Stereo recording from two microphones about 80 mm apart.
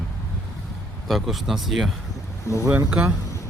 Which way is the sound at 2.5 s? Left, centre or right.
Left.